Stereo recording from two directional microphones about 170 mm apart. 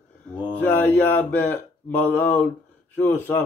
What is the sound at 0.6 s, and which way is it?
Speech, 10° left (ahead or behind).